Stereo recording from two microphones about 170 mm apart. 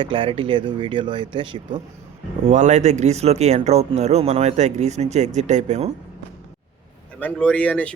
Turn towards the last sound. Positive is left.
turn(degrees=10)  # may be behind; listen again after turning